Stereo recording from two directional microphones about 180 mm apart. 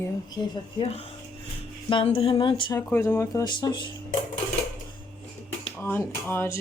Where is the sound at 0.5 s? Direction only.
30° left (ahead or behind).